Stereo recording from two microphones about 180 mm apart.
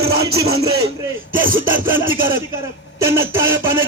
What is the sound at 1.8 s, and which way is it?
Speech, 10° right (ahead or behind).